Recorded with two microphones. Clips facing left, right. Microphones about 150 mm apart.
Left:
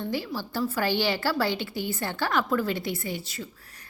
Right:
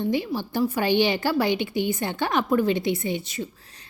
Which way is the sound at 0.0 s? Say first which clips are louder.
Right 5 dB; 20° right (ahead or behind).